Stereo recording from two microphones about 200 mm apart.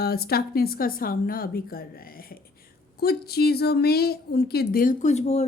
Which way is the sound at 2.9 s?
50° left (ahead or behind).